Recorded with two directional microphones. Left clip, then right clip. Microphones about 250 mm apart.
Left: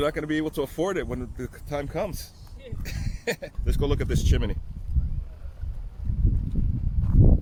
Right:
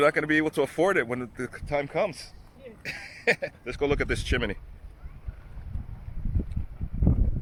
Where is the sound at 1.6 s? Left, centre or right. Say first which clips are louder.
Right 3 dB; centre.